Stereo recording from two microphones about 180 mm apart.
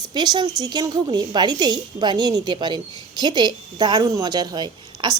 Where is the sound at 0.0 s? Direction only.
25° right (ahead or behind).